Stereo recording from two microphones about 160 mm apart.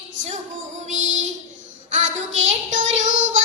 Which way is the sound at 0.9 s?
50° right (ahead or behind).